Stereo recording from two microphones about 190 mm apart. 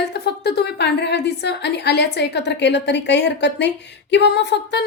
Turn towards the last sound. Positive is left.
turn(degrees=65)  # may be behind; listen again after turning